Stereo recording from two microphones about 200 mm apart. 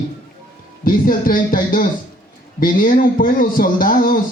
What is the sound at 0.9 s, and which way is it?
Speech, 45° left (ahead or behind).